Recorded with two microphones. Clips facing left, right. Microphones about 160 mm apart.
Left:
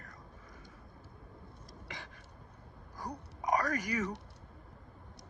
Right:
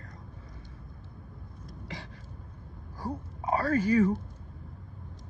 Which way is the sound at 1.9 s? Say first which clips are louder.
Right 5 dB; 20° right (ahead or behind).